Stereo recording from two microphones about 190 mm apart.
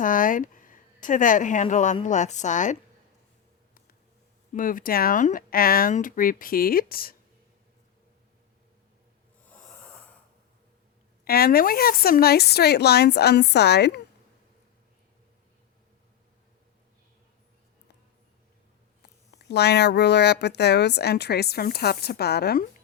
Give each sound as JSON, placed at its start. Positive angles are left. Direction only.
{"t": 0.0, "sound": "a woman's voice", "side_deg": 45}
{"t": 4.5, "sound": "speech", "side_deg": 45}
{"t": 9.5, "sound": "snoring", "side_deg": 5}
{"t": 11.3, "sound": "speech", "side_deg": 55}
{"t": 19.3, "sound": "speech", "side_deg": 60}